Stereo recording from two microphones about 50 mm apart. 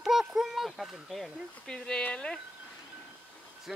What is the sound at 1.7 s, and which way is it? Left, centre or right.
Speech, left.